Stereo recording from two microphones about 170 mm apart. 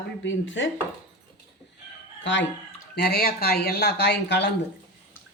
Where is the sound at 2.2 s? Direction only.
90° left.